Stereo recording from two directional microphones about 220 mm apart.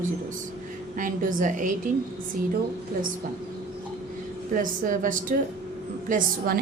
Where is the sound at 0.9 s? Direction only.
35° right (ahead or behind).